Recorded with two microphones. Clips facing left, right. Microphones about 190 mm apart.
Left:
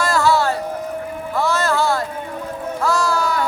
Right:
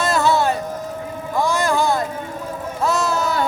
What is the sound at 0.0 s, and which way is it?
Music, 20° right (ahead or behind).